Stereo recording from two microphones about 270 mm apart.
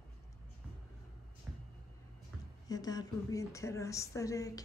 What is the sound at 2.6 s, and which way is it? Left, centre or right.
A woman's voice, centre.